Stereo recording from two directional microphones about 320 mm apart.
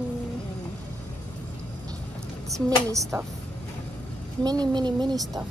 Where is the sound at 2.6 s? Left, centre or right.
Centre.